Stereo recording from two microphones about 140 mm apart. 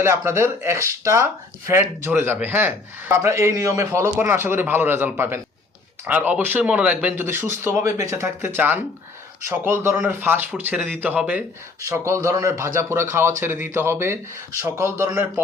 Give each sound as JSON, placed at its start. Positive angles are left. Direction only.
{"t": 0.0, "sound": "a man's voice", "side_deg": -15}